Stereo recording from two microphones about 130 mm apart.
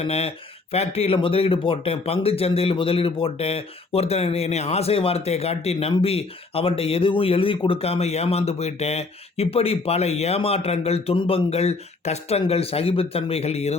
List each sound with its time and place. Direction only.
0.0 s speech: 50° left (ahead or behind)